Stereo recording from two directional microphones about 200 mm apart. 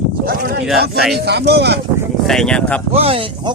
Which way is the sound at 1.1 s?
55° right (ahead or behind).